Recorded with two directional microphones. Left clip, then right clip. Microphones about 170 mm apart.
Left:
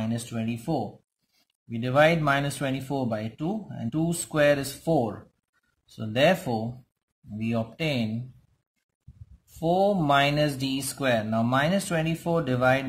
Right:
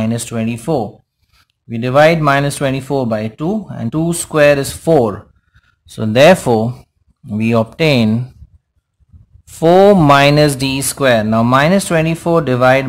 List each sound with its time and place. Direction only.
0.0 s speech: 35° right (ahead or behind)
9.6 s speech: 45° right (ahead or behind)